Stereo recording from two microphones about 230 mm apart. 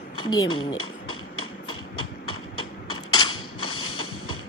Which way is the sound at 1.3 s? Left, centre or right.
Left.